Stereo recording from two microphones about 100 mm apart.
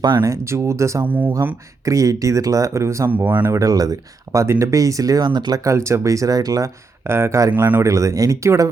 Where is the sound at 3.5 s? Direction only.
35° right (ahead or behind).